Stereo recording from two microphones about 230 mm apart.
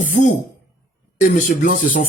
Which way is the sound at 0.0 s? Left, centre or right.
Left.